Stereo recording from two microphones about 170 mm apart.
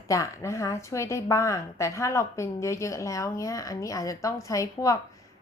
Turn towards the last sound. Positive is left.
turn(degrees=20)  # may be behind; listen again after turning